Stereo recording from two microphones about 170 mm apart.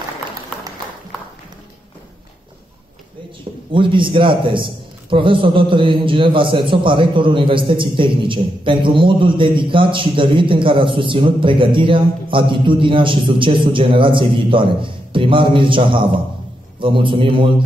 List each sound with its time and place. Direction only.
3.7 s a man's voice: 30° right (ahead or behind)